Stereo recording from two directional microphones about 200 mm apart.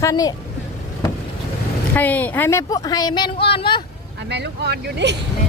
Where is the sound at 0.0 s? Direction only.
20° left (ahead or behind).